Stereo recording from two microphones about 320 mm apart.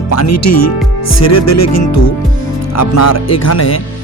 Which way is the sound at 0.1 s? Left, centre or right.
Left.